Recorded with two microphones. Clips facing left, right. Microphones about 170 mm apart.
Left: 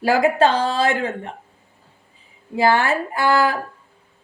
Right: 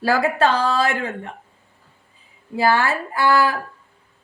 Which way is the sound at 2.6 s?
20° left (ahead or behind).